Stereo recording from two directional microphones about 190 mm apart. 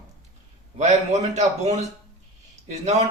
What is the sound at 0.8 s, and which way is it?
A man's voice, 35° right (ahead or behind).